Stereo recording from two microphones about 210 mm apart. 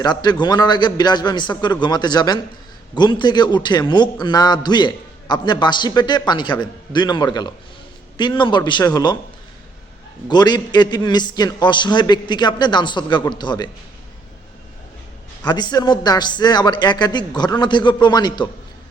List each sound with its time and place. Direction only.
0.0 s a man's voice: 20° left (ahead or behind)
10.2 s a man's voice: 20° left (ahead or behind)
15.4 s a man's voice: 20° left (ahead or behind)